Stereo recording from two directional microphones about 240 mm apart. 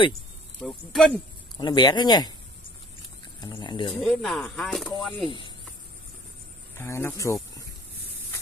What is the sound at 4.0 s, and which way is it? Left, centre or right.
Speech, centre.